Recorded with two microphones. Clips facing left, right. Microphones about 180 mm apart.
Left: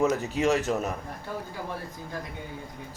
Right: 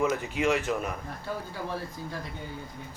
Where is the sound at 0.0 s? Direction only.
40° left (ahead or behind).